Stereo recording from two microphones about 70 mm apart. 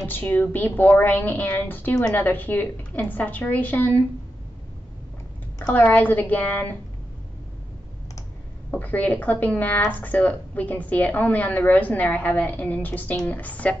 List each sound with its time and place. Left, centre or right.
0.0 s a woman's voice: left
5.7 s a woman's voice: left
8.6 s a woman's voice: left